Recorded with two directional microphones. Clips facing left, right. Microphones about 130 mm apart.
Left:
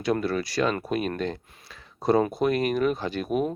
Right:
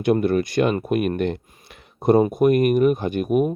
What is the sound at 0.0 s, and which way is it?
Speech, 55° right (ahead or behind).